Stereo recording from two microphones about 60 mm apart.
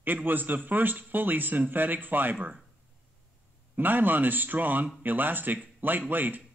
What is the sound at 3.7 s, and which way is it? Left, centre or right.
Speech, right.